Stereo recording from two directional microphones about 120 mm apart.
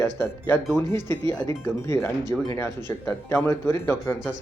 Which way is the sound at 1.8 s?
25° left (ahead or behind).